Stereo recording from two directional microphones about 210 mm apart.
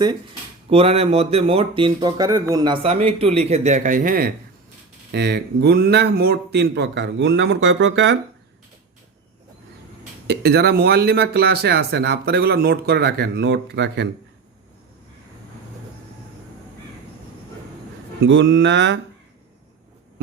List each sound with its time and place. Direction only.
0.7 s speech: 30° right (ahead or behind)
5.1 s speech: 55° right (ahead or behind)
10.2 s speech: 50° right (ahead or behind)
18.2 s mantra: 55° right (ahead or behind)